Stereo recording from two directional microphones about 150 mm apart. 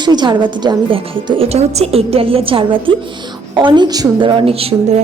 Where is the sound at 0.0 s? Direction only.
30° right (ahead or behind).